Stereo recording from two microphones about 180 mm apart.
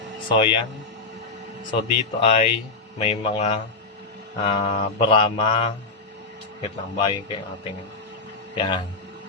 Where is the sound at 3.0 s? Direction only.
35° left (ahead or behind).